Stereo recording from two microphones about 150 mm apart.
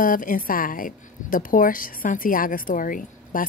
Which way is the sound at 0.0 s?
65° left (ahead or behind).